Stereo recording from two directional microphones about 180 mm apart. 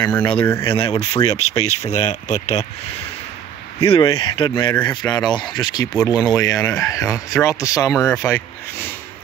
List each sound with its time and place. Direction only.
0.0 s speech: 25° left (ahead or behind)
0.4 s speech: 15° left (ahead or behind)
0.7 s speech: 35° left (ahead or behind)
3.8 s speech: 30° left (ahead or behind); by 8.9 s 15° left (ahead or behind)